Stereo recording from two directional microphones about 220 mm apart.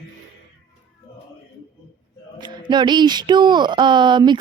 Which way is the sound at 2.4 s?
20° right (ahead or behind).